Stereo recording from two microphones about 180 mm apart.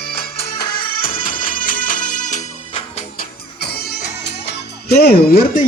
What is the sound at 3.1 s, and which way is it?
Music, 60° left (ahead or behind).